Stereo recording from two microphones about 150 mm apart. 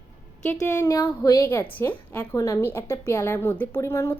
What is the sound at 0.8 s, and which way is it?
A woman's voice, 20° left (ahead or behind).